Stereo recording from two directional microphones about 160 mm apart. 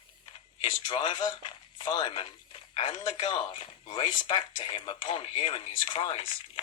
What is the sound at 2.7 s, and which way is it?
Speech, 30° left (ahead or behind).